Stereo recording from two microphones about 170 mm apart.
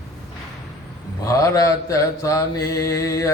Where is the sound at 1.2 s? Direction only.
20° left (ahead or behind).